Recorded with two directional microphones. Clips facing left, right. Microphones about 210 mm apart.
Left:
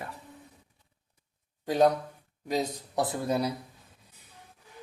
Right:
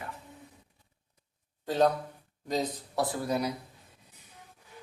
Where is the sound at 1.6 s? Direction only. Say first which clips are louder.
Left 2 dB; 15° left (ahead or behind).